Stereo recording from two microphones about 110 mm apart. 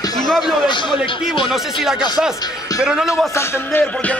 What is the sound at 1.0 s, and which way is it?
Speech, 50° left (ahead or behind).